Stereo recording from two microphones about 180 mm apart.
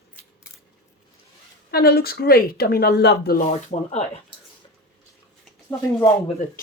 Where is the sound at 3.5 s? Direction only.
40° left (ahead or behind).